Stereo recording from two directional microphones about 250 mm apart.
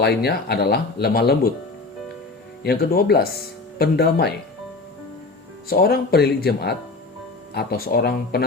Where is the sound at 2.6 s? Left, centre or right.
Left.